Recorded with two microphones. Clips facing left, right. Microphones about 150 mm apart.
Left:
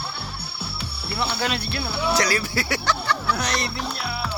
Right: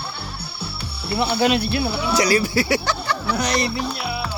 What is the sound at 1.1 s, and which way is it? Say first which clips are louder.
Cricket: right 7 dB; 15° right (ahead or behind).